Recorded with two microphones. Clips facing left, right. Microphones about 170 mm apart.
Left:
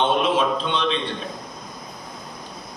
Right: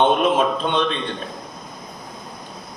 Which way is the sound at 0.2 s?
50° right (ahead or behind).